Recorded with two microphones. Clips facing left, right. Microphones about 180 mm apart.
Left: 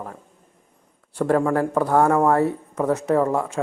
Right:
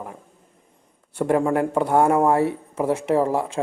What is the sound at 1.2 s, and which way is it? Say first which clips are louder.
Speech: even; 20° right (ahead or behind).